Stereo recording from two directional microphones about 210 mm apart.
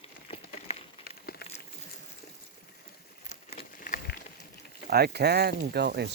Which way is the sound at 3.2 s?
30° left (ahead or behind).